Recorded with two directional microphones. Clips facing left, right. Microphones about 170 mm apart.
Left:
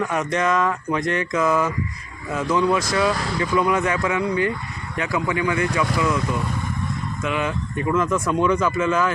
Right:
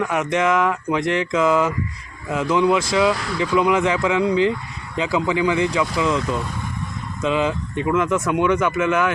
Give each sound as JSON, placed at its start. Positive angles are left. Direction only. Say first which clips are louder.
{"t": 0.0, "sound": "speech", "louder": "right 2 dB", "side_deg": -10}